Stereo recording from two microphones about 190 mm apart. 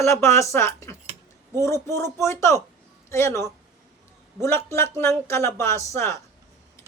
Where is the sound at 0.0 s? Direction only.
15° left (ahead or behind).